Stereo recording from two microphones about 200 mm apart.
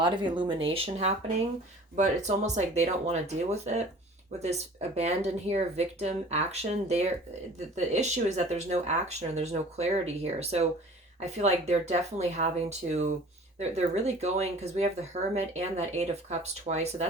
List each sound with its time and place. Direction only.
0.0 s speech: 25° right (ahead or behind)